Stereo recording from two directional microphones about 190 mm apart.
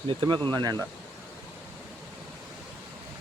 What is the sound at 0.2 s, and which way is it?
Speech, 25° right (ahead or behind).